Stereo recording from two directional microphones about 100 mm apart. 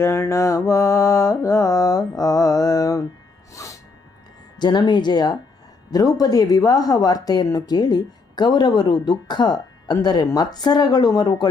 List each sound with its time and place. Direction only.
0.0 s mantra: 30° left (ahead or behind)
3.5 s music: 30° left (ahead or behind)
4.5 s speech: 45° left (ahead or behind)